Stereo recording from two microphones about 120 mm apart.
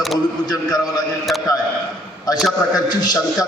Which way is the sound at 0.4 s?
30° left (ahead or behind).